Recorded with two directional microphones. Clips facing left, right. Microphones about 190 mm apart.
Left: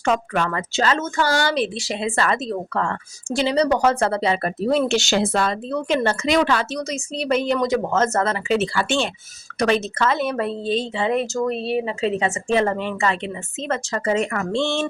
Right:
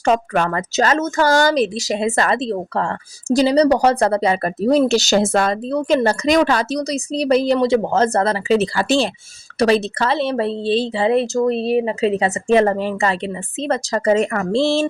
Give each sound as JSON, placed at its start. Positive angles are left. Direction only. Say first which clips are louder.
{"t": 0.0, "sound": "speech", "louder": "right 4 dB", "side_deg": -40}